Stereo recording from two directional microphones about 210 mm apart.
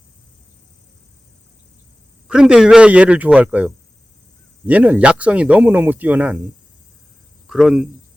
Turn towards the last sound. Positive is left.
turn(degrees=-5)  # may be behind; listen again after turning